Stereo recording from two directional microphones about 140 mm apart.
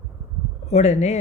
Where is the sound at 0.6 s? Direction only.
50° left (ahead or behind).